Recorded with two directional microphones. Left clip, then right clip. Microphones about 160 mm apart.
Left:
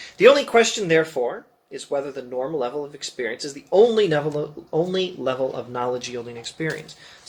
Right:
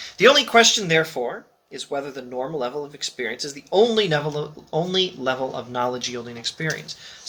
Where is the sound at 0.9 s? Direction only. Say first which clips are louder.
Left 1 dB; 25° right (ahead or behind).